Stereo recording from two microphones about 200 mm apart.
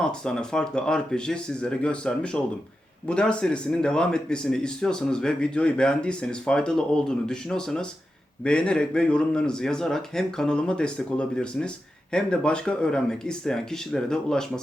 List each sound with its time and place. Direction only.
0.0 s speech: 5° left (ahead or behind)